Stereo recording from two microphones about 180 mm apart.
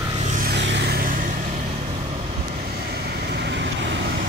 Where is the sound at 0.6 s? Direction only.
75° right (ahead or behind); by 1.3 s 50° right (ahead or behind).